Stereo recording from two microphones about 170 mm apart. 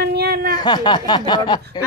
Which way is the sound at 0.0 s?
70° right (ahead or behind).